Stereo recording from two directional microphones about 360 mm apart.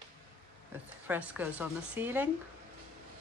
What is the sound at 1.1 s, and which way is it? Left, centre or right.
Speech, centre.